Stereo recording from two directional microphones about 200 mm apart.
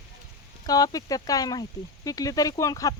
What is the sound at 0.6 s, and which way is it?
Speech, 20° left (ahead or behind).